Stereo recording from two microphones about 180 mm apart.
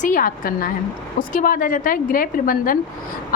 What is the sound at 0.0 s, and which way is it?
A woman's voice, 50° left (ahead or behind).